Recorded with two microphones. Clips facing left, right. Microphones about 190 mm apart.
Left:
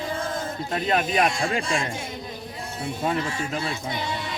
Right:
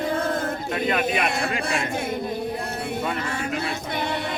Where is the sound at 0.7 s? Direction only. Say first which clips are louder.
Left 1 dB; 35° left (ahead or behind).